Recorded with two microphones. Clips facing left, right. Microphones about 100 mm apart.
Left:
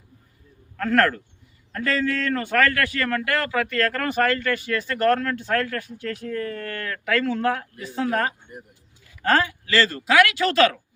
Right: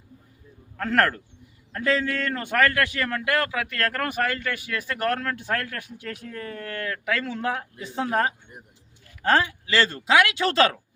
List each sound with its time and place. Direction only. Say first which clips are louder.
0.8 s a man's voice: left 2 dB; 15° right (ahead or behind)